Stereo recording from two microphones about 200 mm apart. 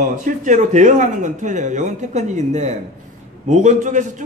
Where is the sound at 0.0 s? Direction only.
40° right (ahead or behind).